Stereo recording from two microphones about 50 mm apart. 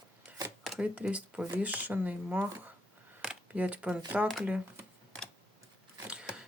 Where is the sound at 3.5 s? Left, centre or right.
Right.